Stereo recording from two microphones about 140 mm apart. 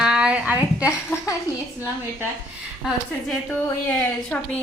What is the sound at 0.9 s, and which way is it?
Speech, 20° left (ahead or behind).